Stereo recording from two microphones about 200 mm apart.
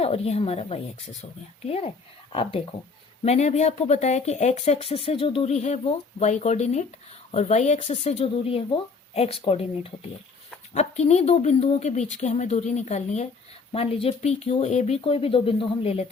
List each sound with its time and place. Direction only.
0.0 s speech: 30° left (ahead or behind)
2.3 s speech: 25° left (ahead or behind)